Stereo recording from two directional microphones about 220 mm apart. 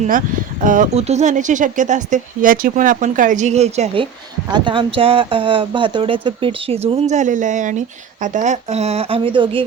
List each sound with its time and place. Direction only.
0.6 s speech: 35° right (ahead or behind)